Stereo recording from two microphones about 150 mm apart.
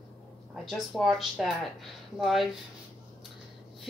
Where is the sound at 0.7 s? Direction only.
Centre (ahead or behind).